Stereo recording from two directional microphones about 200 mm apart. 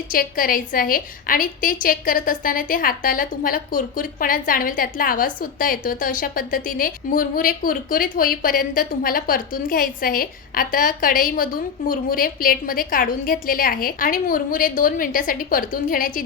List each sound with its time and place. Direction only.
0.1 s a woman's voice: 45° left (ahead or behind)